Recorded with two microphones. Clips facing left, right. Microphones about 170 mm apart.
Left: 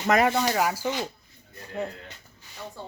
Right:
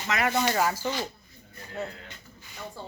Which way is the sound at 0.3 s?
10° left (ahead or behind).